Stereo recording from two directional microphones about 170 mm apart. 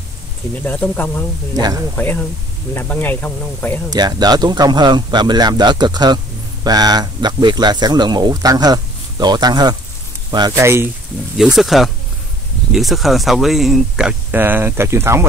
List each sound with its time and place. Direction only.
0.6 s speech: 10° left (ahead or behind)
1.5 s speech: 20° right (ahead or behind)
2.0 s speech: 10° left (ahead or behind)
3.9 s speech: 25° right (ahead or behind)
11.3 s speech: centre (ahead or behind)